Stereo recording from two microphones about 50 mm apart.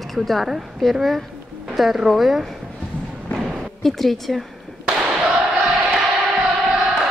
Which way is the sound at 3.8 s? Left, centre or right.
Centre.